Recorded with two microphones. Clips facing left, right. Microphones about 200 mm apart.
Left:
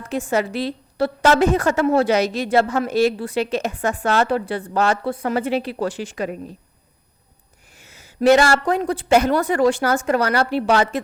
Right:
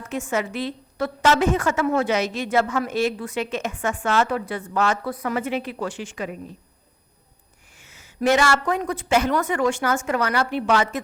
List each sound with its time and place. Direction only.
0.1 s a woman's voice: 35° left (ahead or behind)
7.8 s a woman's voice: 35° left (ahead or behind)